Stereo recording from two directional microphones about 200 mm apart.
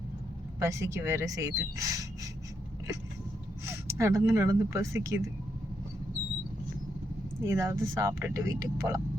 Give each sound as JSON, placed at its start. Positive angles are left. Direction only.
{"t": 0.6, "sound": "speech", "side_deg": -15}
{"t": 3.7, "sound": "speech", "side_deg": -15}
{"t": 7.4, "sound": "speech", "side_deg": -15}